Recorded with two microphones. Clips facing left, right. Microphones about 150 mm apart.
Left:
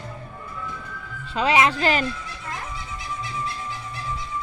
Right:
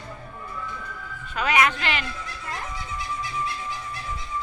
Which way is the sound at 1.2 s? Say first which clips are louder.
Left 3 dB; 30° left (ahead or behind).